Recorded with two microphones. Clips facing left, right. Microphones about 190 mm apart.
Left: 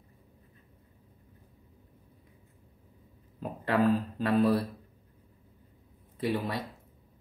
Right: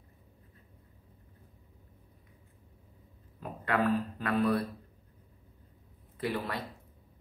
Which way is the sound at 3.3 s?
25° left (ahead or behind).